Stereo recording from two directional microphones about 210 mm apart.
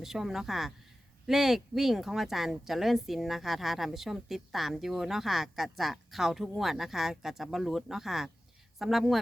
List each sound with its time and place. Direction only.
0.0 s speech: centre (ahead or behind)